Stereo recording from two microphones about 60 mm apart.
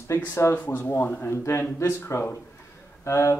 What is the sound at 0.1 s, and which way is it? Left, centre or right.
Speech, left.